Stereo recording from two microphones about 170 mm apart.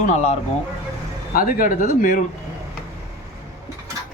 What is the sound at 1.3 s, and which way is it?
Speech, 60° left (ahead or behind).